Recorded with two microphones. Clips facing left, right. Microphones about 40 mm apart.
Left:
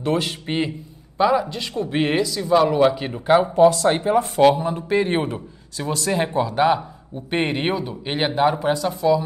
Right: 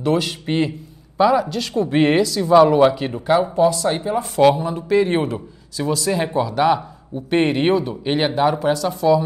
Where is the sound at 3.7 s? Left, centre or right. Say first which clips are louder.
Left 2 dB; left.